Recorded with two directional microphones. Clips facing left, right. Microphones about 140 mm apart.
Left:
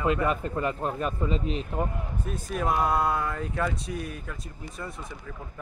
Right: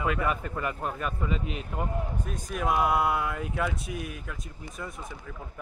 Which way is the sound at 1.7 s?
Centre (ahead or behind).